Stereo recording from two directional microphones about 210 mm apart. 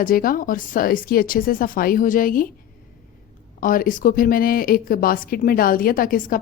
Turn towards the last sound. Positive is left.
turn(degrees=40)  # may be behind; listen again after turning